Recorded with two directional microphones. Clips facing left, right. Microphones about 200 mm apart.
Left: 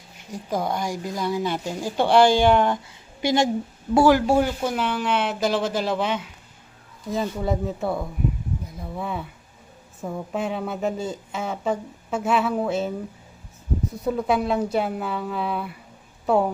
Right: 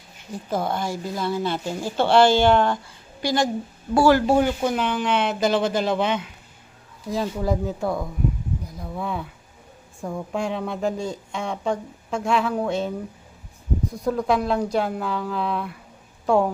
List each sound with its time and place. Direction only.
0.3 s a woman's voice: 10° left (ahead or behind)
14.0 s a woman's voice: 5° left (ahead or behind)